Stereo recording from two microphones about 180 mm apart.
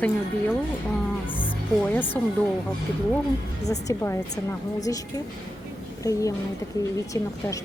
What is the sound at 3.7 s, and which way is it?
Speech, 20° left (ahead or behind).